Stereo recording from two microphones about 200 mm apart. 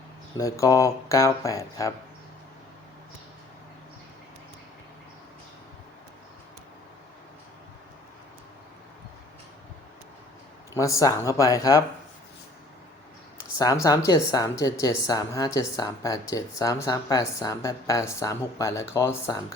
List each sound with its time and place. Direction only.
0.3 s speech: 15° left (ahead or behind)
10.8 s speech: 15° left (ahead or behind)
13.6 s speech: 20° left (ahead or behind)